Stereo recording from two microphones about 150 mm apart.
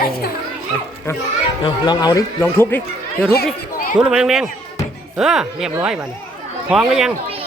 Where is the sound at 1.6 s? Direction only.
25° left (ahead or behind).